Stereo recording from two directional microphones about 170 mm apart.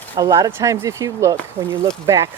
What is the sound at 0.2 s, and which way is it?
Speech, 20° right (ahead or behind).